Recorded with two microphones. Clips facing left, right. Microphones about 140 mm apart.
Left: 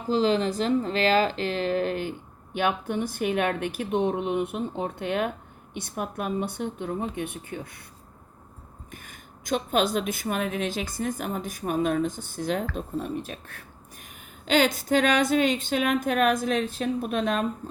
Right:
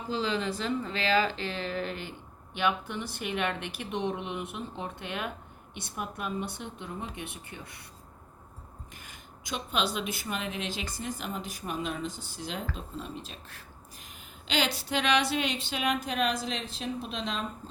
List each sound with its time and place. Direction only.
0.1 s speech: 40° left (ahead or behind)
8.9 s a woman's voice: 50° left (ahead or behind)